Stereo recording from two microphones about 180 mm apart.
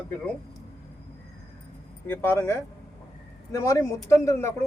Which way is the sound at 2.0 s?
10° left (ahead or behind).